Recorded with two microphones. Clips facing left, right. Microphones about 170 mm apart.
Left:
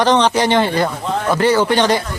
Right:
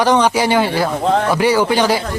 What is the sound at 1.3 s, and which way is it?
Speech, 10° right (ahead or behind).